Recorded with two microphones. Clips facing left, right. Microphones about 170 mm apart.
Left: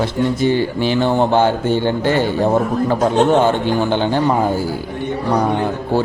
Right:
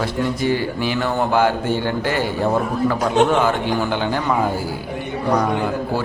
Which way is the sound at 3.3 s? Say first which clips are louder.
Left 4 dB; 30° left (ahead or behind).